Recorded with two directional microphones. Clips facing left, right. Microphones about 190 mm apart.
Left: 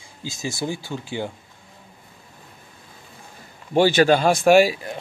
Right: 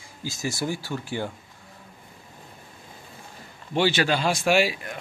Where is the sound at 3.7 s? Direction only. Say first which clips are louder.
Left 7 dB; 45° left (ahead or behind).